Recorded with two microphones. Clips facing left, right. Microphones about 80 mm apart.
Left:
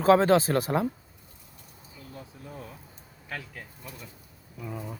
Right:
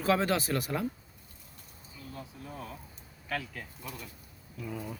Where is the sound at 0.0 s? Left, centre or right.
Left.